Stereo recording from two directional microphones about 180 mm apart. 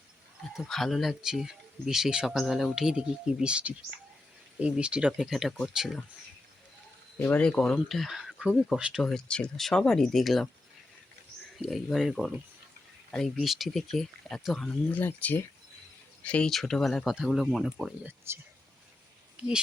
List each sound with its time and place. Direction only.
0.5 s speech: centre (ahead or behind)
7.2 s speech: 10° left (ahead or behind)
11.5 s speech: centre (ahead or behind)
19.4 s speech: 5° right (ahead or behind)